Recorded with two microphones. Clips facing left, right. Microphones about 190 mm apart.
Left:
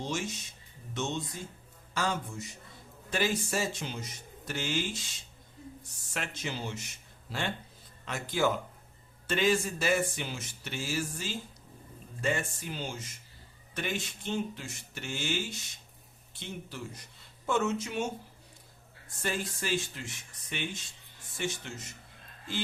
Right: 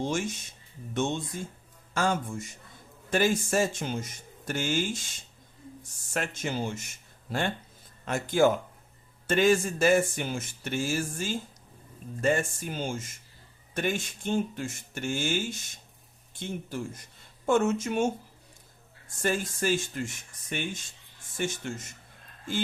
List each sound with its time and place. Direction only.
0.0 s a man's voice: 50° right (ahead or behind)
19.2 s speech: 45° right (ahead or behind)